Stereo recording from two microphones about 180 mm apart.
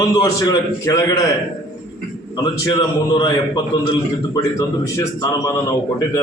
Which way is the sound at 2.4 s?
25° left (ahead or behind).